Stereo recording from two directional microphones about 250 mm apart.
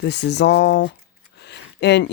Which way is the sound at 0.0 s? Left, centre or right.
Left.